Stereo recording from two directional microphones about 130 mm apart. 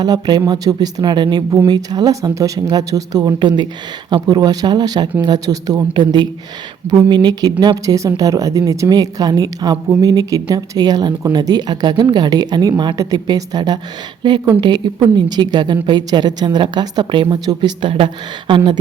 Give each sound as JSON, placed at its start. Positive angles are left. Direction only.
{"t": 0.0, "sound": "a woman's voice", "side_deg": -30}